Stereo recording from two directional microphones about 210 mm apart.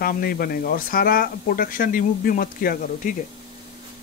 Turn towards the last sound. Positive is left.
turn(degrees=45)  # may be behind; listen again after turning